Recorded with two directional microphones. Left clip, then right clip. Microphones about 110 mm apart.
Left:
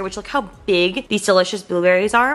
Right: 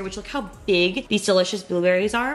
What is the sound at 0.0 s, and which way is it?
A woman's voice, 20° left (ahead or behind).